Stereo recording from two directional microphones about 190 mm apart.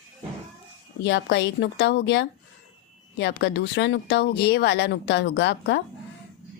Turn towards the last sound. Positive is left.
turn(degrees=65)  # may be behind; listen again after turning